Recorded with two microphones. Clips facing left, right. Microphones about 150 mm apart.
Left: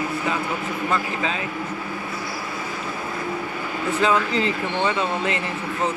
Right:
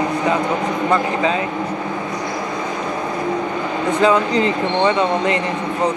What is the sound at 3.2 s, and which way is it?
Speech, 80° right.